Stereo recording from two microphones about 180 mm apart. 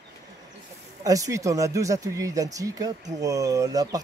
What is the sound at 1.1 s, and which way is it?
Speech, 20° right (ahead or behind).